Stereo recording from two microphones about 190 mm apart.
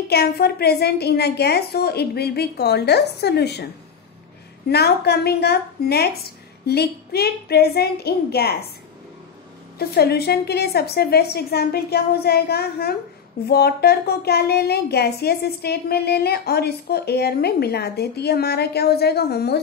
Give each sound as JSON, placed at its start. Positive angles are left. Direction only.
{"t": 0.1, "sound": "speech", "side_deg": 55}
{"t": 4.6, "sound": "speech", "side_deg": 60}
{"t": 9.8, "sound": "speech", "side_deg": 55}